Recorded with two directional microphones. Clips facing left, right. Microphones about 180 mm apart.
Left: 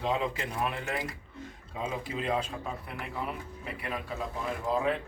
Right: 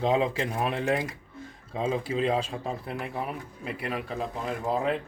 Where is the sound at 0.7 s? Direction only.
35° right (ahead or behind).